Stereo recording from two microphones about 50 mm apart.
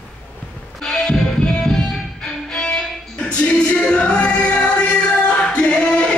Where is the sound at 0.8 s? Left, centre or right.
Centre.